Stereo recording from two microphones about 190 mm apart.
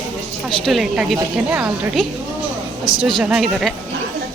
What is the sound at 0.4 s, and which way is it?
A woman's voice, centre (ahead or behind).